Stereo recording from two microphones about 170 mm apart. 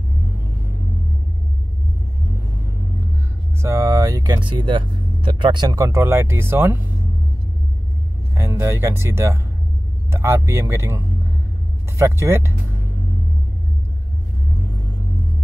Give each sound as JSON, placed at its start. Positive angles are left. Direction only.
{"t": 3.6, "sound": "speech", "side_deg": -20}
{"t": 8.4, "sound": "speech", "side_deg": -15}
{"t": 12.0, "sound": "speech", "side_deg": -15}